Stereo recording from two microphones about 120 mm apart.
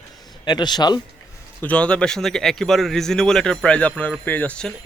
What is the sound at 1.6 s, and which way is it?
A man's voice, 10° left (ahead or behind).